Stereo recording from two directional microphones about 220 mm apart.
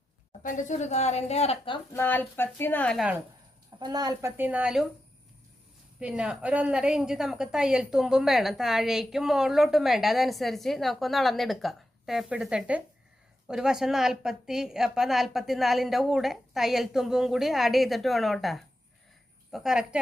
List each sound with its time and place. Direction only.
0.4 s a woman's voice: 35° left (ahead or behind)
1.9 s a woman's voice: 10° left (ahead or behind)
3.8 s speech: 20° right (ahead or behind)
6.0 s a woman's voice: 5° right (ahead or behind)